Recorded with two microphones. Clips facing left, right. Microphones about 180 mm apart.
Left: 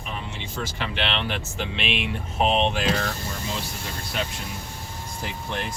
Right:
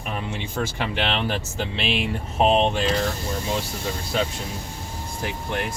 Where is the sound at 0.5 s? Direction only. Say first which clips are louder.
Right 3 dB; 45° right (ahead or behind).